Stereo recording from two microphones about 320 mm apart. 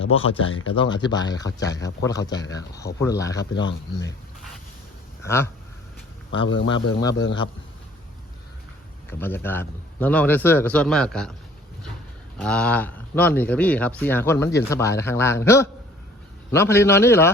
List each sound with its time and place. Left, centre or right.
0.0 s speech: centre
0.4 s speech: left
0.7 s speech: centre
3.5 s speech: left
5.2 s speech: centre
6.3 s speech: left
9.0 s a man's voice: centre
12.4 s speech: centre